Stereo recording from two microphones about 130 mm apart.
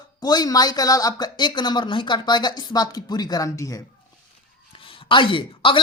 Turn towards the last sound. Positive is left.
turn(degrees=40)  # may be behind; listen again after turning